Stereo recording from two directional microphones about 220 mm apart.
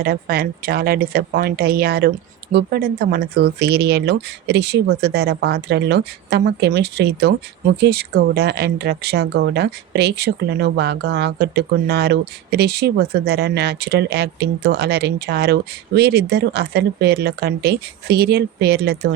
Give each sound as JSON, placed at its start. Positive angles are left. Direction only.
{"t": 0.0, "sound": "speech", "side_deg": -45}